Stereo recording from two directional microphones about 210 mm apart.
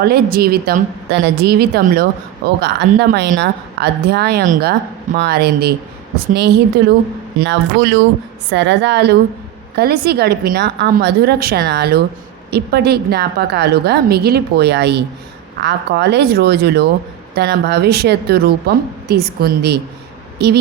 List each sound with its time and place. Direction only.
0.0 s speech: 45° right (ahead or behind)